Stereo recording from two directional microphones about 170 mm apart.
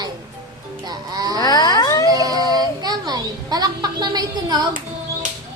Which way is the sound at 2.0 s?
20° right (ahead or behind).